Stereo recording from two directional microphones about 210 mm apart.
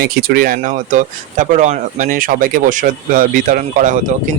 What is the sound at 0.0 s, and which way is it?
Speech, 45° right (ahead or behind).